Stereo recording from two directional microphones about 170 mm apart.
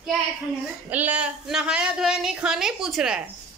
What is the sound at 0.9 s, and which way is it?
A man's voice, 10° right (ahead or behind).